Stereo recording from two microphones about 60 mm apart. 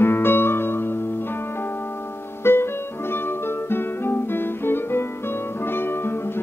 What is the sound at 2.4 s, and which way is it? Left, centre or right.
Music, left.